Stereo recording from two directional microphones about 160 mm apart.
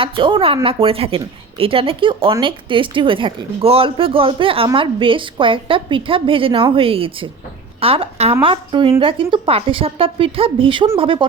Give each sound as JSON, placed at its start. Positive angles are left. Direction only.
{"t": 0.0, "sound": "a woman's voice", "side_deg": -30}